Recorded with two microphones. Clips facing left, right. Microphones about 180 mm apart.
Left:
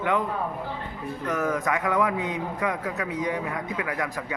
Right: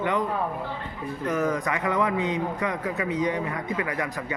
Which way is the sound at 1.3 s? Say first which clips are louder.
Even; 5° left (ahead or behind).